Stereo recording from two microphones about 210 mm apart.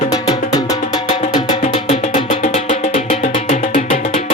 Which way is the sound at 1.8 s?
35° left (ahead or behind).